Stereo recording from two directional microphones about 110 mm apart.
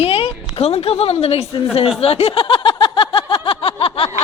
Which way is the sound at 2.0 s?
65° left (ahead or behind).